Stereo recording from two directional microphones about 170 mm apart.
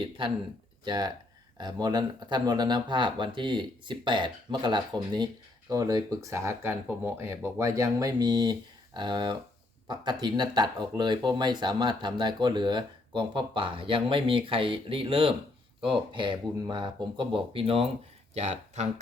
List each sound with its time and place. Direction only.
0.2 s speech: 30° right (ahead or behind)